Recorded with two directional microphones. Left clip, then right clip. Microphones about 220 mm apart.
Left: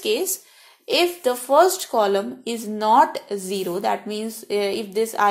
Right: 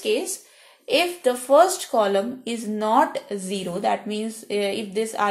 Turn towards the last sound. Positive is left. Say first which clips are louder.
# left 2 dB
turn(degrees=25)  # may be behind; listen again after turning